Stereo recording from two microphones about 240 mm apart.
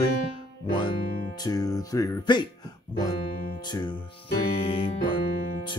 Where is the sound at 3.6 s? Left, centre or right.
Centre.